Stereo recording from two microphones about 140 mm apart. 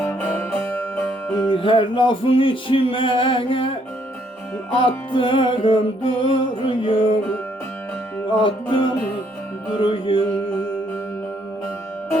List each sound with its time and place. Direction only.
0.0 s music: 15° left (ahead or behind)
1.4 s music: 35° left (ahead or behind)
8.3 s music: 35° left (ahead or behind)
9.7 s music: 40° left (ahead or behind)